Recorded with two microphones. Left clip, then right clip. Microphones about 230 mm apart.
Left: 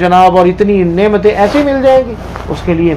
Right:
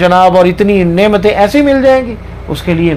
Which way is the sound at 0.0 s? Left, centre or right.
Right.